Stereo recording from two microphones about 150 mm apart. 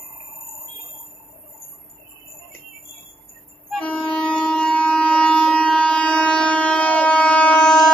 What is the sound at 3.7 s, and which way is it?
Train, 10° left (ahead or behind).